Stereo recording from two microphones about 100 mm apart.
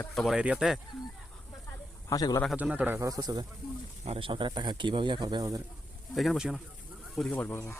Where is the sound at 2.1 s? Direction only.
35° left (ahead or behind).